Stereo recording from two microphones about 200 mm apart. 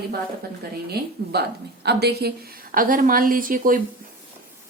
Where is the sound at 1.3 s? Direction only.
55° right (ahead or behind).